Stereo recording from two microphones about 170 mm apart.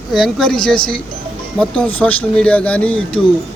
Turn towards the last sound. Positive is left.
turn(degrees=5)  # may be behind; listen again after turning